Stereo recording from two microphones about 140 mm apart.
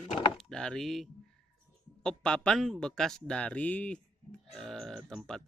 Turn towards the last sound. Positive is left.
turn(degrees=5)  # may be behind; listen again after turning